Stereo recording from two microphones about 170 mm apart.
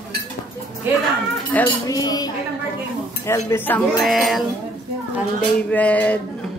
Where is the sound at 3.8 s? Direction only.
Centre (ahead or behind).